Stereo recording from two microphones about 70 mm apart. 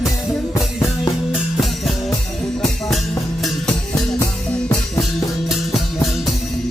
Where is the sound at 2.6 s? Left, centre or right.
Centre.